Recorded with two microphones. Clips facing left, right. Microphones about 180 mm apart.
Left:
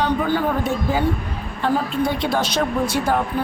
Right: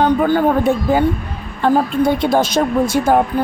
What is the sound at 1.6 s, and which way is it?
A woman's voice, 50° right (ahead or behind).